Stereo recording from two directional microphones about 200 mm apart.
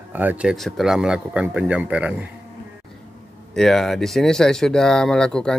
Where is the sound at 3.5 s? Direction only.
Centre (ahead or behind).